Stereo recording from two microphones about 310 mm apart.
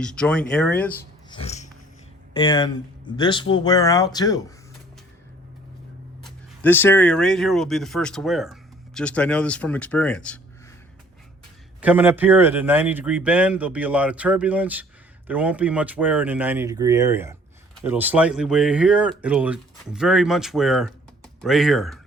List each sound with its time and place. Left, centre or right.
0.0 s a man's voice: centre
1.3 s a sound: centre
2.3 s speech: centre
6.2 s a man's voice: centre
11.8 s a man's voice: centre